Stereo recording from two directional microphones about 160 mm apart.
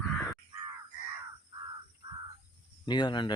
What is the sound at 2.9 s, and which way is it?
Speech, 25° left (ahead or behind).